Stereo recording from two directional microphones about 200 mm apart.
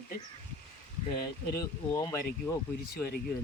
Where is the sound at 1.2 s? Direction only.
20° left (ahead or behind).